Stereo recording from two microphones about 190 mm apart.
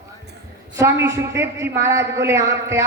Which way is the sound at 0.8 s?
15° right (ahead or behind).